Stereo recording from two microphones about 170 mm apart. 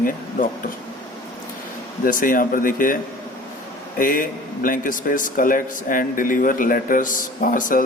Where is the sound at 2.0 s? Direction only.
55° left (ahead or behind).